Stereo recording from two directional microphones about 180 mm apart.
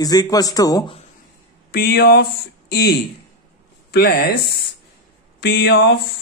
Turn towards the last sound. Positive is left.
turn(degrees=70)  # may be behind; listen again after turning